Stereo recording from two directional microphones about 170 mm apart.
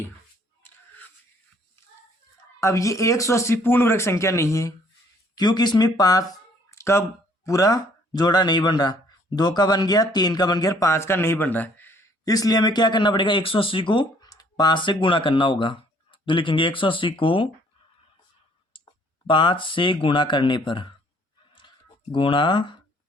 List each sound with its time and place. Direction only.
0.6 s a sound: 10° left (ahead or behind)
2.6 s speech: 20° left (ahead or behind)
6.7 s a sound: 15° left (ahead or behind)
7.4 s speech: 20° left (ahead or behind)
18.7 s clicking: 30° left (ahead or behind)
19.3 s speech: 30° left (ahead or behind)
22.1 s speech: 30° left (ahead or behind)